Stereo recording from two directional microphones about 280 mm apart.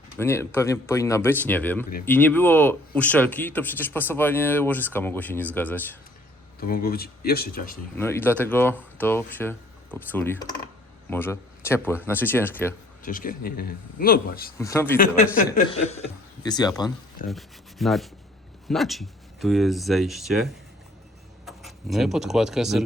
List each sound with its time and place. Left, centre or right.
0.2 s speech: centre
6.6 s speech: left
7.9 s speech: centre
13.1 s speech: left
14.6 s speech: centre
14.9 s speech: left
17.2 s speech: centre